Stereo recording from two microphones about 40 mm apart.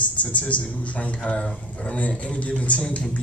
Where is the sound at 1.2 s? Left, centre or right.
Left.